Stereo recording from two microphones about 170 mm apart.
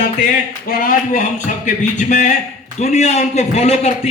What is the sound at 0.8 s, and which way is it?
A man's voice, 55° left (ahead or behind).